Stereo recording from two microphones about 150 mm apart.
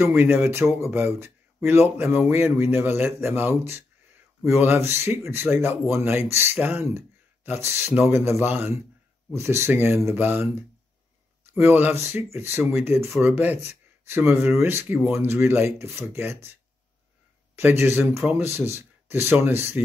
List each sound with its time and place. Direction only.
0.0 s speech: 15° right (ahead or behind)
11.5 s speech: 15° right (ahead or behind)
17.6 s speech: 15° right (ahead or behind)